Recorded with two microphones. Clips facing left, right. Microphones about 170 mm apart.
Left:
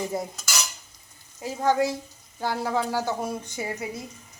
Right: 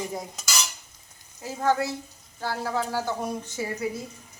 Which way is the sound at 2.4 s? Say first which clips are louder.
Left 2 dB; 15° left (ahead or behind).